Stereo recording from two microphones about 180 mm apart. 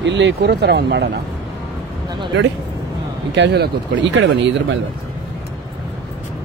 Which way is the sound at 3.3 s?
70° right (ahead or behind).